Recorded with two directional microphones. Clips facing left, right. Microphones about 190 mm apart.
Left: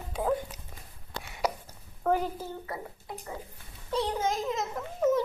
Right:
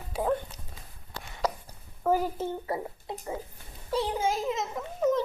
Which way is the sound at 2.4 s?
25° right (ahead or behind).